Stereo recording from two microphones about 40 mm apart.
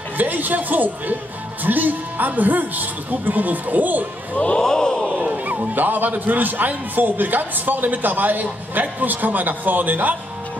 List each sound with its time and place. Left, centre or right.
0.2 s a man's voice: right
4.6 s a sound: centre
5.1 s a man's voice: right